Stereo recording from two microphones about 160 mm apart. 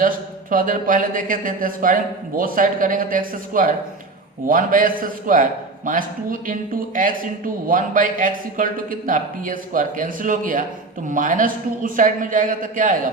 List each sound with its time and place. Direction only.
0.5 s a man's voice: 60° right (ahead or behind)